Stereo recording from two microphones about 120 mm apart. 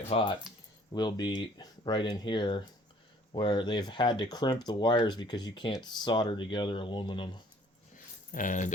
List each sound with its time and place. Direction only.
0.1 s speech: 45° left (ahead or behind)
8.4 s speech: 90° left